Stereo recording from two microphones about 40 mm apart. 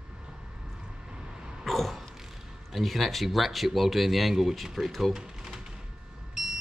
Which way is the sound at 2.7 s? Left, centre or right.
Centre.